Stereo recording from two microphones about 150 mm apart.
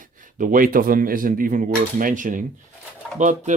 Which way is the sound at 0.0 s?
60° right (ahead or behind).